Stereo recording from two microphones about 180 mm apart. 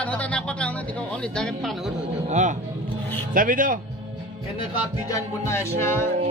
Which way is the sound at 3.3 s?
50° right (ahead or behind).